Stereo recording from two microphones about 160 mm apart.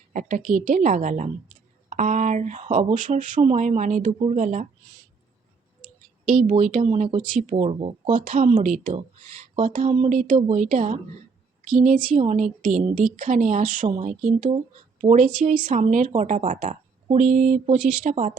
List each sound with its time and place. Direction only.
0.1 s speech: 50° right (ahead or behind)
6.5 s speech: 50° right (ahead or behind)
7.3 s speech: 50° right (ahead or behind)
8.1 s speech: 55° right (ahead or behind)
12.1 s speech: 45° right (ahead or behind)